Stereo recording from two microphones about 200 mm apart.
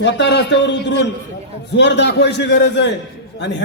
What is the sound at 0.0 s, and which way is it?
A man's voice, 60° left (ahead or behind).